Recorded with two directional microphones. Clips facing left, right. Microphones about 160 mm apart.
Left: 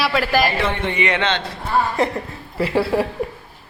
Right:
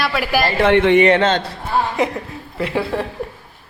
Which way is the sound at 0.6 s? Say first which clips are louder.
Right 9 dB; 80° right.